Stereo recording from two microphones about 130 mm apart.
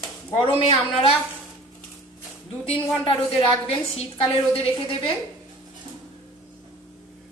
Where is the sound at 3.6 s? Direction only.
50° left (ahead or behind).